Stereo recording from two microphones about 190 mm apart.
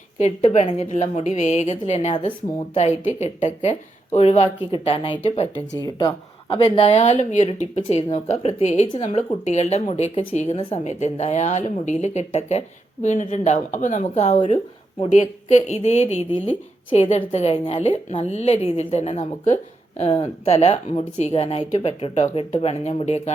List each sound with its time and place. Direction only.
0.2 s a woman's voice: 35° left (ahead or behind)